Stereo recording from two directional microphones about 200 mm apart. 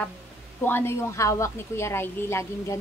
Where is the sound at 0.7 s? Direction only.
10° left (ahead or behind).